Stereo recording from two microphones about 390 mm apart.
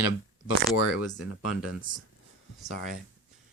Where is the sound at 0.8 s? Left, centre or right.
Left.